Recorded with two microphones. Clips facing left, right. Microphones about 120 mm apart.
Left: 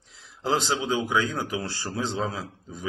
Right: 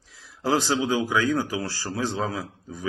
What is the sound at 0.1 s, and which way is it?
Speech, 20° left (ahead or behind).